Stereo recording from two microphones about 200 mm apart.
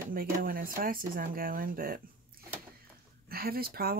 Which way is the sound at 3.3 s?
50° right (ahead or behind).